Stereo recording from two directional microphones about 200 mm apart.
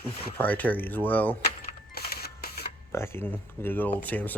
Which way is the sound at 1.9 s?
50° left (ahead or behind).